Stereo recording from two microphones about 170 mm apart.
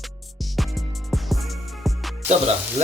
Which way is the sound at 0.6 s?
Centre (ahead or behind).